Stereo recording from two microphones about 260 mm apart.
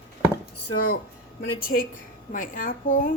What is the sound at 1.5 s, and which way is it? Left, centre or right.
A woman's voice, left.